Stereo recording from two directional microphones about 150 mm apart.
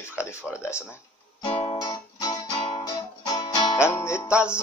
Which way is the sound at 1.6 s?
40° left (ahead or behind).